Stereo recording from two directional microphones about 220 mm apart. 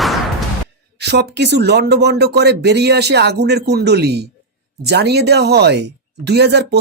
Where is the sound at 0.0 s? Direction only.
Centre (ahead or behind).